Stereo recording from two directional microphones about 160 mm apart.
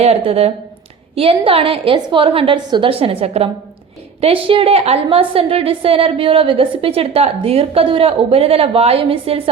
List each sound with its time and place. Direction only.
0.3 s a woman's voice: 40° right (ahead or behind)